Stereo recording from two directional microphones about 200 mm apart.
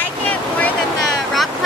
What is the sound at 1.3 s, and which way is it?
Vehicle, centre (ahead or behind).